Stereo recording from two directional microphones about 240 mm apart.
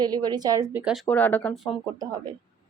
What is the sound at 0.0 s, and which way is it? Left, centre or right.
A woman's voice, centre.